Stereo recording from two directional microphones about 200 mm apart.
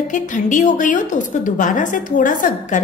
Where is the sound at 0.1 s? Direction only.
40° left (ahead or behind).